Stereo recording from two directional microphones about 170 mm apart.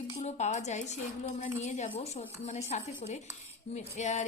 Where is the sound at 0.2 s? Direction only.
40° left (ahead or behind).